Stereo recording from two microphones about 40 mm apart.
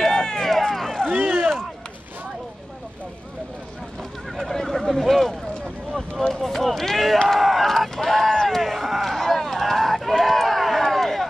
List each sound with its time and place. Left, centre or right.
0.0 s run: centre
1.0 s vehicle: centre
4.5 s a sound: centre
6.3 s run: centre
7.2 s a sound: centre
9.1 s run: centre